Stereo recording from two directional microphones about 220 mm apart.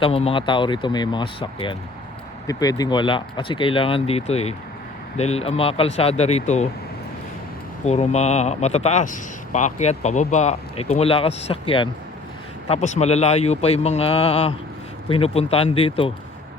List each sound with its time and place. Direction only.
0.0 s speech: 25° left (ahead or behind)
7.9 s a man's voice: 30° left (ahead or behind)